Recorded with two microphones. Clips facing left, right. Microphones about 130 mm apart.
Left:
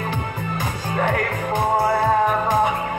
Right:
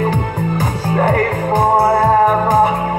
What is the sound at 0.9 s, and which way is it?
Music, 40° right (ahead or behind).